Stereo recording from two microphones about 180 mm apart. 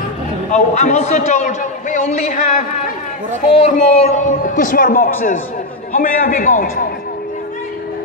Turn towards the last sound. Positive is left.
turn(degrees=50)  # may be behind; listen again after turning